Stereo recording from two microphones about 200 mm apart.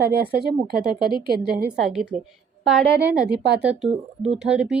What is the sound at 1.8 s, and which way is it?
A woman's voice, 5° right (ahead or behind).